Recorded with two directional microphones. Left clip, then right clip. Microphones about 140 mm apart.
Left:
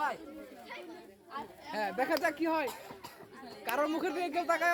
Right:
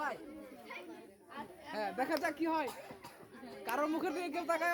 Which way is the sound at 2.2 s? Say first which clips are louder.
Left 4 dB; 15° left (ahead or behind).